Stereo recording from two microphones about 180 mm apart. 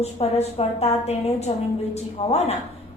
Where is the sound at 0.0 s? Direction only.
35° left (ahead or behind).